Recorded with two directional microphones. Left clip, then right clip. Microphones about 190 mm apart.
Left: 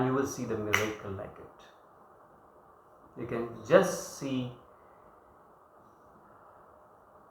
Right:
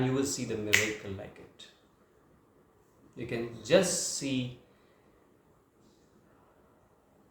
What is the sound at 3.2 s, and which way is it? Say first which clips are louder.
Speech: left 1 dB; 20° right (ahead or behind).